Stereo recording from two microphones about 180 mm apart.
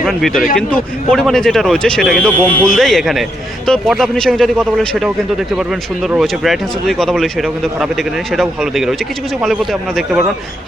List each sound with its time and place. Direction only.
0.0 s speech: centre (ahead or behind)